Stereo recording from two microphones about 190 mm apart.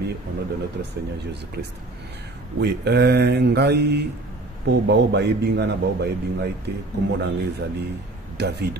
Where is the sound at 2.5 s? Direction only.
60° right (ahead or behind).